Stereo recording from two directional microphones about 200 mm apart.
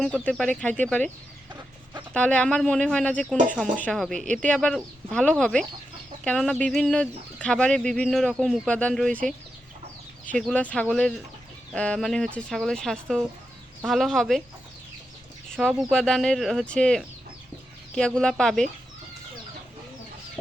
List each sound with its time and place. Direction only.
0.0 s speech: 5° left (ahead or behind)
2.1 s speech: 5° left (ahead or behind)
10.3 s speech: 5° left (ahead or behind)
15.6 s speech: centre (ahead or behind)